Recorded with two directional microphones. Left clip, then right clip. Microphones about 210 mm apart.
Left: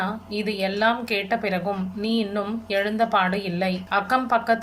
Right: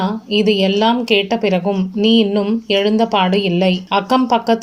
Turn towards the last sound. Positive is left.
turn(degrees=-30)  # may be behind; listen again after turning